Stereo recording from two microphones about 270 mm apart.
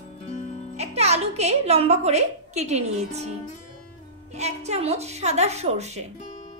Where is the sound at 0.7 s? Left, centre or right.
Right.